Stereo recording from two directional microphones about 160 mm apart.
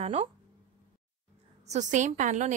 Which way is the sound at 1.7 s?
50° right (ahead or behind).